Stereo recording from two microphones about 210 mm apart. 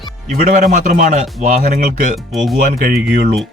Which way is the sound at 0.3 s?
35° right (ahead or behind).